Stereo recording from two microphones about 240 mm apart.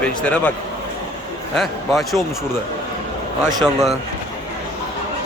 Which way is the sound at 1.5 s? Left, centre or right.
Centre.